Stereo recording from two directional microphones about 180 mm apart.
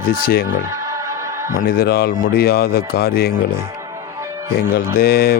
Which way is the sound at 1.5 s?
55° left (ahead or behind).